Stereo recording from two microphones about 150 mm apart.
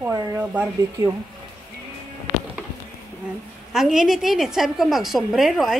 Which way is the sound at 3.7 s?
5° right (ahead or behind).